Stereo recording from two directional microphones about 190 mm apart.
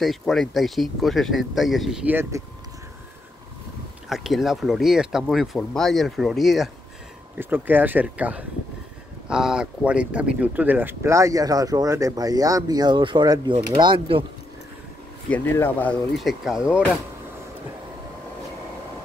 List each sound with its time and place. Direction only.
0.0 s speech: centre (ahead or behind)
2.3 s speech: 15° right (ahead or behind)
4.1 s speech: centre (ahead or behind); by 14.2 s 30° right (ahead or behind)
15.2 s speech: 10° left (ahead or behind)
16.2 s speech: centre (ahead or behind)